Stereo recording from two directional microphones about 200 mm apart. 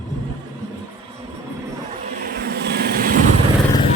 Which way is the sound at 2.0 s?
50° right (ahead or behind).